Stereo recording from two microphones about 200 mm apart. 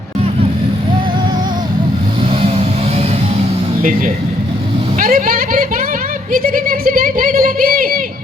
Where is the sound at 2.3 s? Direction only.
30° right (ahead or behind).